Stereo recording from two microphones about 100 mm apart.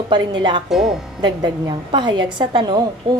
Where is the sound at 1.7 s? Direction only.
55° right (ahead or behind).